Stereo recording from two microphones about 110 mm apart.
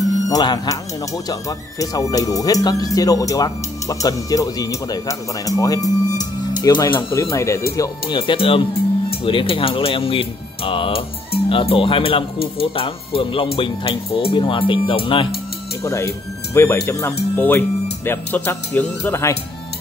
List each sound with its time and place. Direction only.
0.3 s speech: 35° left (ahead or behind)
6.9 s speech: 20° left (ahead or behind)
8.1 s speech: 50° left (ahead or behind)
15.8 s speech: 25° left (ahead or behind)